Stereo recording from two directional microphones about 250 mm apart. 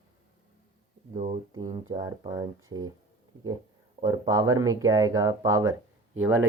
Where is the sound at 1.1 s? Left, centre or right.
Right.